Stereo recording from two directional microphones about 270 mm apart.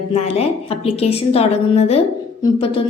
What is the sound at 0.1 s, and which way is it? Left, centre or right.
A woman's voice, left.